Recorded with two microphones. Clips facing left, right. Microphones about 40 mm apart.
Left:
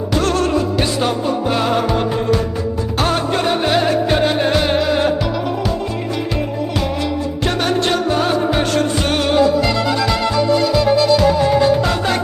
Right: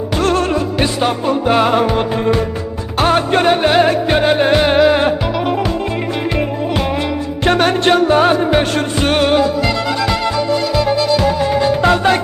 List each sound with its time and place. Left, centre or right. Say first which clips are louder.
0.1 s music: right 1 dB; right
7.4 s music: right 6 dB; right